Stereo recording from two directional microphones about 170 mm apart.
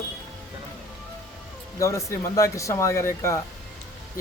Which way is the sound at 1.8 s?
20° left (ahead or behind).